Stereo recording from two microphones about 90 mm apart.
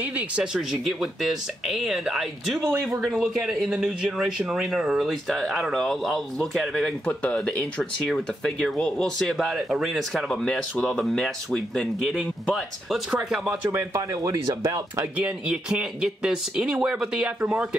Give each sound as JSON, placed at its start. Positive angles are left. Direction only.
{"t": 0.0, "sound": "speech", "side_deg": -10}
{"t": 8.1, "sound": "speech", "side_deg": 0}
{"t": 13.1, "sound": "speech", "side_deg": -10}
{"t": 13.7, "sound": "speech", "side_deg": -35}
{"t": 15.1, "sound": "speech", "side_deg": -15}